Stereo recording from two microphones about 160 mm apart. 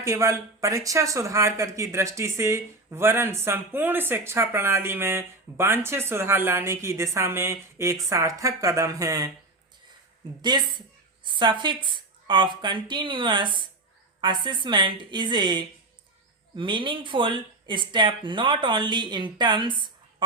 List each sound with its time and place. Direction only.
0.0 s speech: 20° right (ahead or behind)
10.5 s a woman's voice: 25° right (ahead or behind)